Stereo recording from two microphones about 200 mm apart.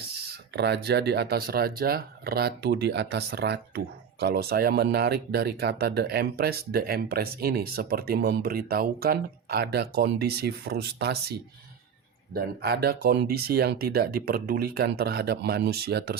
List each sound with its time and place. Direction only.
0.5 s speech: 55° right (ahead or behind)